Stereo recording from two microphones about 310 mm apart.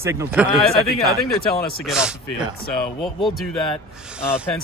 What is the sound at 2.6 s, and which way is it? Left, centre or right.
Speech, left.